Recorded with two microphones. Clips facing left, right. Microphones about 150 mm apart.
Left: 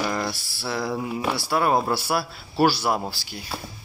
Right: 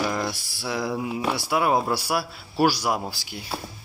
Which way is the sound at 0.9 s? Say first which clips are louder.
Even; 5° right (ahead or behind).